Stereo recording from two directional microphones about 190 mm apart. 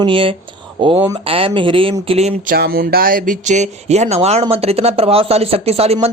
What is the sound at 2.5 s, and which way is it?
Speech, 55° right (ahead or behind).